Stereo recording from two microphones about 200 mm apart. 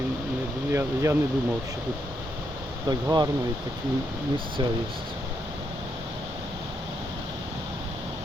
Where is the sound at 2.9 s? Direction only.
20° right (ahead or behind).